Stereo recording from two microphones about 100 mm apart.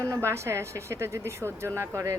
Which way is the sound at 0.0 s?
30° right (ahead or behind).